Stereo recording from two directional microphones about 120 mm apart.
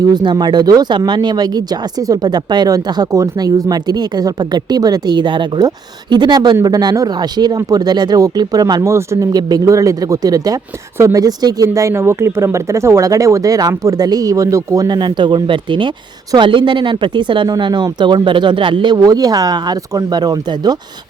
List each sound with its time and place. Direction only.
0.0 s speech: 40° right (ahead or behind)